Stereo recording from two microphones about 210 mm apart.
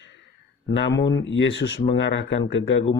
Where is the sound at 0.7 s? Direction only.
60° left (ahead or behind).